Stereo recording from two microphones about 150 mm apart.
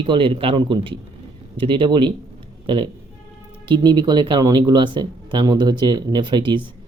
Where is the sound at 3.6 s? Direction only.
30° right (ahead or behind).